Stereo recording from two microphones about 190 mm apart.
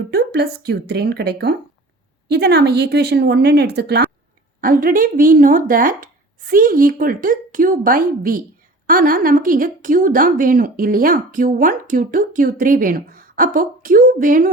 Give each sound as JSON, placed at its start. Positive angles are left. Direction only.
{"t": 0.1, "sound": "speech", "side_deg": -55}
{"t": 4.6, "sound": "a woman's voice", "side_deg": -45}